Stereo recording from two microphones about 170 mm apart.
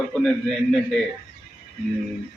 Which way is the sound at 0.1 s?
Centre (ahead or behind).